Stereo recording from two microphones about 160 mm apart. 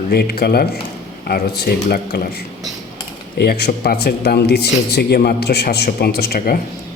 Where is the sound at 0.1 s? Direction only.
75° left (ahead or behind).